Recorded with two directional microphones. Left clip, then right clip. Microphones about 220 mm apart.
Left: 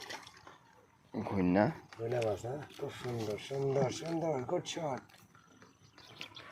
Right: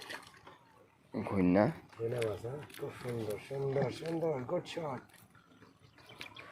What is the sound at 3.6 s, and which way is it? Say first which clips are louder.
Speech: left 1 dB; 40° left (ahead or behind).